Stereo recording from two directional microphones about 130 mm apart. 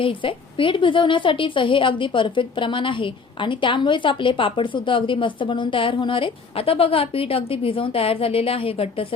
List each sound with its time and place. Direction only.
0.0 s a woman's voice: 40° left (ahead or behind)